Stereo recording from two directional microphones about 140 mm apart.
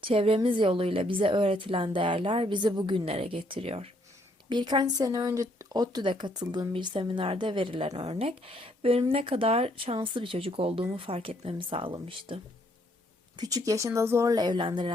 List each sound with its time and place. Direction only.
0.0 s speech: 40° right (ahead or behind)
4.4 s speech: 30° right (ahead or behind)
13.3 s speech: 25° right (ahead or behind)